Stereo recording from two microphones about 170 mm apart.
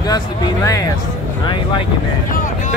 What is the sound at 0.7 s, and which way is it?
Speech, 20° left (ahead or behind).